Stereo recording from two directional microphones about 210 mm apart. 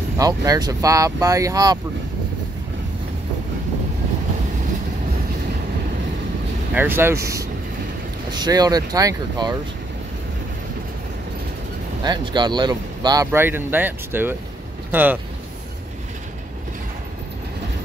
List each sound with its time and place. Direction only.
0.2 s speech: 15° right (ahead or behind)
6.7 s speech: 10° right (ahead or behind)
12.0 s speech: 20° right (ahead or behind)